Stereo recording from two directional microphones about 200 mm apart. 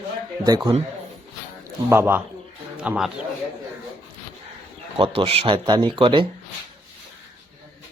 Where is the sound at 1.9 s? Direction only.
10° right (ahead or behind).